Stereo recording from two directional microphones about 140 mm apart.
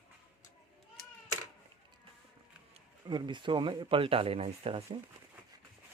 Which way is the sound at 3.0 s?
35° right (ahead or behind).